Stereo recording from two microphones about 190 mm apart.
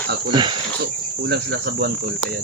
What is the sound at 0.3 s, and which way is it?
Cricket, 25° right (ahead or behind).